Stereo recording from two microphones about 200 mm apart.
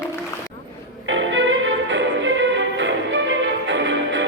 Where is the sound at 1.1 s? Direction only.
70° right (ahead or behind).